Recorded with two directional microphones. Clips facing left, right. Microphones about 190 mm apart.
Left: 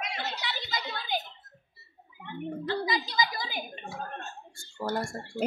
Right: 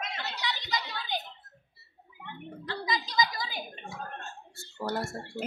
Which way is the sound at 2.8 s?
30° left (ahead or behind).